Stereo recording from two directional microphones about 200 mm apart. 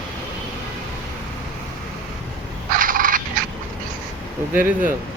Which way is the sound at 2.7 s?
45° right (ahead or behind).